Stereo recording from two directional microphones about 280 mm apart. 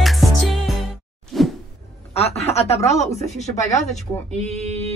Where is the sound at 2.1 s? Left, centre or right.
Left.